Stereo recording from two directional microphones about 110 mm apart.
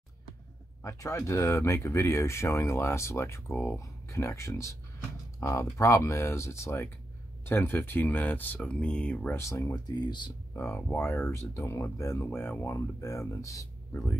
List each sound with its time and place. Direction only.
0.8 s speech: 25° left (ahead or behind); by 9.3 s 10° left (ahead or behind)
9.3 s speech: 30° left (ahead or behind)
10.5 s speech: 25° left (ahead or behind)